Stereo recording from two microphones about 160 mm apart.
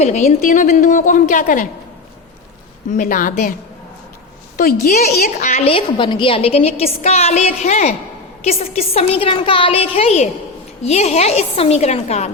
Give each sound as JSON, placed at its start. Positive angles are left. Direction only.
{"t": 0.0, "sound": "a woman's voice", "side_deg": 45}
{"t": 2.9, "sound": "speech", "side_deg": 55}
{"t": 4.5, "sound": "a woman's voice", "side_deg": 60}